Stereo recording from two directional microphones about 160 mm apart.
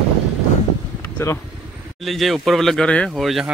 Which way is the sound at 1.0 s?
15° left (ahead or behind).